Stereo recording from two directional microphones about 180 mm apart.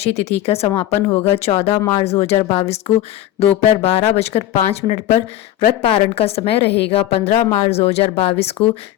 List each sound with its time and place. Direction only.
0.0 s speech: 35° left (ahead or behind)
1.7 s speech: 10° left (ahead or behind)
2.0 s speech: 35° left (ahead or behind)
6.7 s a woman's voice: 70° left (ahead or behind)
6.9 s speech: 35° left (ahead or behind)